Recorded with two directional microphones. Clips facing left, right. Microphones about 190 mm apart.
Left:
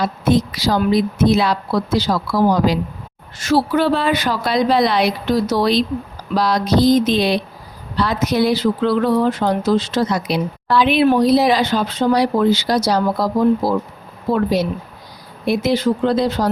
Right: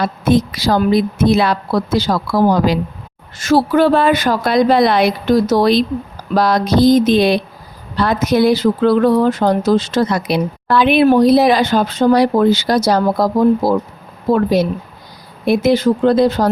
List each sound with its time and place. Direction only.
0.0 s speech: 55° right (ahead or behind)